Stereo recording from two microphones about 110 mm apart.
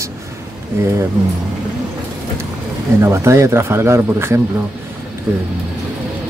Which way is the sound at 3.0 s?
25° right (ahead or behind).